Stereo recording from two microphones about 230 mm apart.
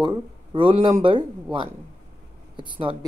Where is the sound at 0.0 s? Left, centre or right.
Right.